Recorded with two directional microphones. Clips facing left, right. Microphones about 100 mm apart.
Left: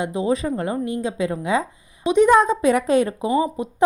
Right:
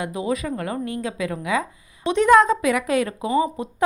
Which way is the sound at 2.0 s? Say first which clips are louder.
Even; 15° left (ahead or behind).